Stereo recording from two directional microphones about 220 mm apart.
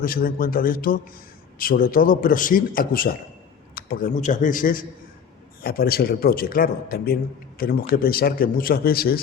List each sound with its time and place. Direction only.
0.0 s a man's voice: 40° left (ahead or behind)